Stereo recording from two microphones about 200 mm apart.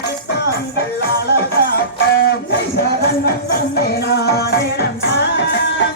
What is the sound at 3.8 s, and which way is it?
Music, 55° left (ahead or behind).